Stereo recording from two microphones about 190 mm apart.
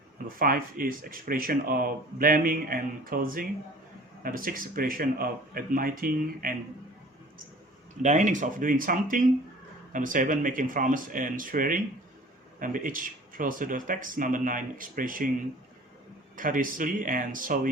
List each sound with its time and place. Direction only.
0.3 s speech: 50° right (ahead or behind)
8.0 s speech: 40° right (ahead or behind)
16.3 s speech: 45° right (ahead or behind)